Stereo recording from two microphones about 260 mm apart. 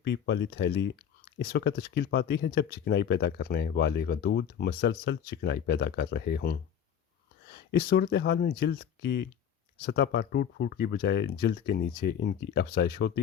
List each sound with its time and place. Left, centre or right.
0.0 s speech: left
7.7 s speech: left